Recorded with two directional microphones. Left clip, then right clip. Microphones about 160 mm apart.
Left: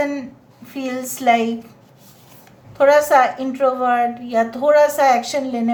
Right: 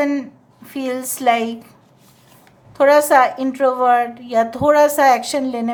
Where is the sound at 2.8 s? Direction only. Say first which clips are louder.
Right 1 dB; 35° right (ahead or behind).